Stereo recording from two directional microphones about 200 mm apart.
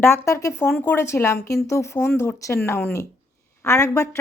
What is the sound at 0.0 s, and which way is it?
Speech, 10° left (ahead or behind).